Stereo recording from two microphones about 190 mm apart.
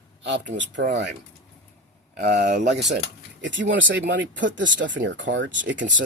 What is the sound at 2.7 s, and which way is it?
Speech, 60° right (ahead or behind).